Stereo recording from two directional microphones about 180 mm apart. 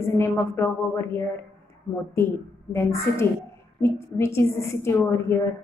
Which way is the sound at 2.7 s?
15° left (ahead or behind).